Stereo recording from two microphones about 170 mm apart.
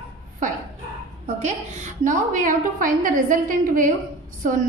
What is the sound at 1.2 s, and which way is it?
A woman's voice, 45° right (ahead or behind).